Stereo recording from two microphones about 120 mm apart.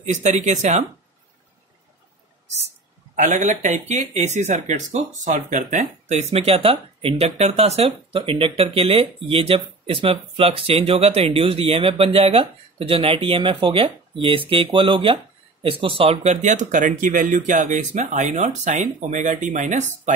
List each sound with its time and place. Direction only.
0.0 s speech: 80° right
2.4 s speech: 70° right (ahead or behind)
3.2 s speech: 85° right; by 11.3 s 60° right (ahead or behind)
11.3 s speech: 50° right (ahead or behind); by 19.9 s 85° right